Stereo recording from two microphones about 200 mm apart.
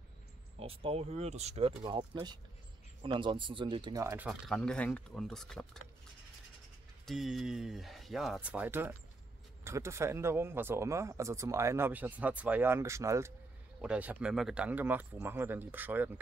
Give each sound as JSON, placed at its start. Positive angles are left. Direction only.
{"t": 0.6, "sound": "speech", "side_deg": -30}
{"t": 4.3, "sound": "speech", "side_deg": 5}
{"t": 7.1, "sound": "speech", "side_deg": 0}